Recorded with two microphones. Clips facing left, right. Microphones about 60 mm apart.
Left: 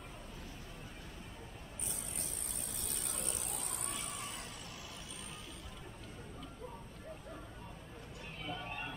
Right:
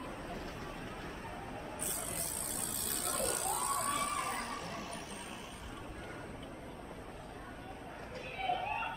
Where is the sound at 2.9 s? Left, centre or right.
Right.